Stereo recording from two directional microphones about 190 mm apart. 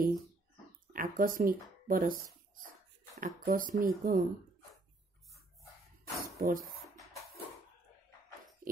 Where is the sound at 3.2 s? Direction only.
45° right (ahead or behind).